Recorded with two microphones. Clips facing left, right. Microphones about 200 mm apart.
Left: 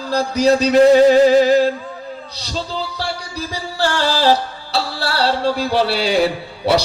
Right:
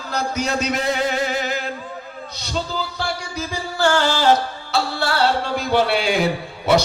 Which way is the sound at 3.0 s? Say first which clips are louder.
Left 1 dB; 35° left (ahead or behind).